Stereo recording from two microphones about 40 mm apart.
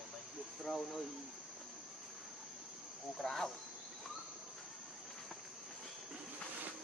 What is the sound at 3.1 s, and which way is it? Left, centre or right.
Speech, centre.